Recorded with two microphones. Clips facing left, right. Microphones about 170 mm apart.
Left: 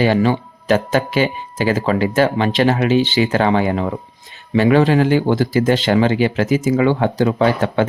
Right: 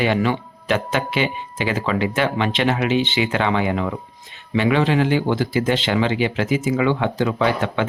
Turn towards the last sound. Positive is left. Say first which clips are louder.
# left 4 dB
turn(degrees=40)  # may be behind; listen again after turning